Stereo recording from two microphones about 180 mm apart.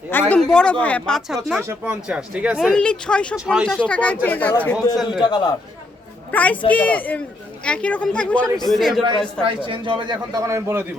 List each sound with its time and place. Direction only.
0.1 s speech: 10° left (ahead or behind)
3.8 s speech: 5° left (ahead or behind)
5.1 s a man's voice: 25° left (ahead or behind)
6.3 s speech: 10° left (ahead or behind)
9.6 s a man's voice: 30° right (ahead or behind)